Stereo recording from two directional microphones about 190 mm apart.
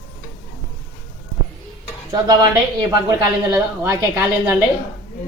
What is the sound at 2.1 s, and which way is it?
Speech, 20° right (ahead or behind).